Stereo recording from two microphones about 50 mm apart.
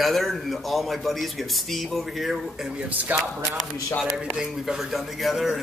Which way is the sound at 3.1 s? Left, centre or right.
Right.